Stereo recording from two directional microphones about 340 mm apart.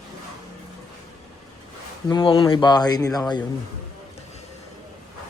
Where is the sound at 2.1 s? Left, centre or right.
Centre.